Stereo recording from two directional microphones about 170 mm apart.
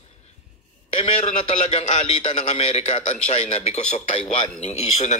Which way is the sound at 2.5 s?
40° left (ahead or behind).